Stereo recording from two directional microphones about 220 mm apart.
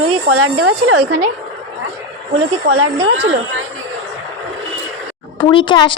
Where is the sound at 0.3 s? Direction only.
75° right (ahead or behind).